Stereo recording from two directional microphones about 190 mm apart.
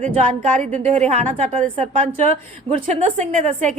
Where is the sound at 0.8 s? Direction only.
35° right (ahead or behind).